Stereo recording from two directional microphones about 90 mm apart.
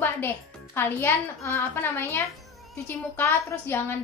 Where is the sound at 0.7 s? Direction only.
25° left (ahead or behind).